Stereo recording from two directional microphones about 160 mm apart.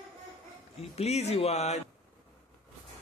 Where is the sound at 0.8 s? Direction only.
40° left (ahead or behind).